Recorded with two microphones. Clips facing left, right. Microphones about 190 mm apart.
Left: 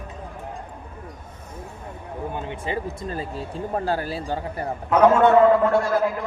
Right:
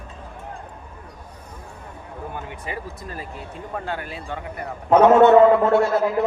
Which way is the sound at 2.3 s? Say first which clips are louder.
Left 5 dB; 25° left (ahead or behind).